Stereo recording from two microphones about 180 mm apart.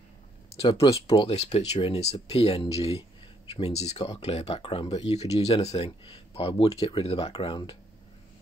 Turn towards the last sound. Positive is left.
turn(degrees=30)  # may be behind; listen again after turning